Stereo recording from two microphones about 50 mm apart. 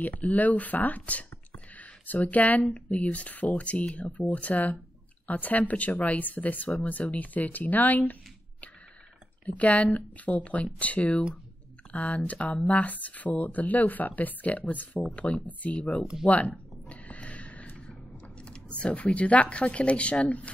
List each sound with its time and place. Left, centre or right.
0.0 s speech: left
16.9 s a sound: left
18.8 s speech: left